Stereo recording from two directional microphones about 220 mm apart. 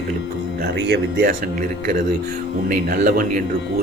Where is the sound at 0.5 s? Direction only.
50° right (ahead or behind).